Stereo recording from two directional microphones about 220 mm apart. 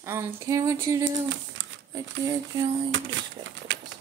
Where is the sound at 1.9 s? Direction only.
15° right (ahead or behind).